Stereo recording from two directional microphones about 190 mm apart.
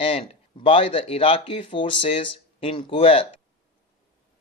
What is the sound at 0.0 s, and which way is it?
Speech, 30° left (ahead or behind).